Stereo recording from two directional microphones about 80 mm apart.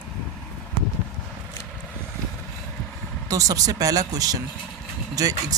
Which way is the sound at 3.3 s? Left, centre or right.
Right.